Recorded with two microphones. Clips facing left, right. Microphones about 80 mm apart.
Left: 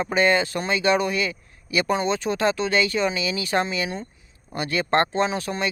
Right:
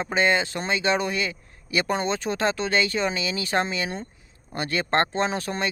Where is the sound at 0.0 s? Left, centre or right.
Right.